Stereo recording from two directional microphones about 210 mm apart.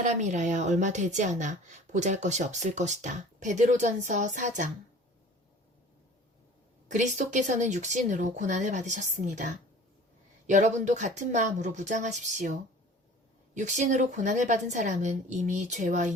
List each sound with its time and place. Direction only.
0.0 s a woman's voice: 35° right (ahead or behind)
6.9 s a woman's voice: 35° right (ahead or behind)